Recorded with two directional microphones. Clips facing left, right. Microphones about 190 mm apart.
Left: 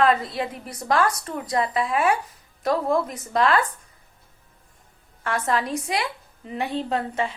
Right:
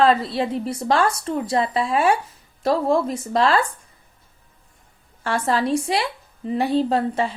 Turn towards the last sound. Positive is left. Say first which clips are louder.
# right 4 dB
turn(degrees=-35)  # may be behind; listen again after turning